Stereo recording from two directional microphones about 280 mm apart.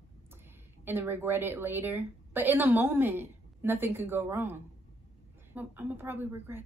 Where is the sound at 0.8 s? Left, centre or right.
Centre.